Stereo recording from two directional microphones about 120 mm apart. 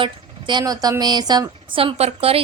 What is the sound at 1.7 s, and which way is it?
Speech, 55° right (ahead or behind).